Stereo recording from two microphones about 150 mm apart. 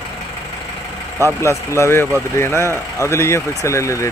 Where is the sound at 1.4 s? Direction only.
20° left (ahead or behind).